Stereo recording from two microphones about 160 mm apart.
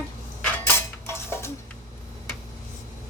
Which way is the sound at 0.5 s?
15° left (ahead or behind).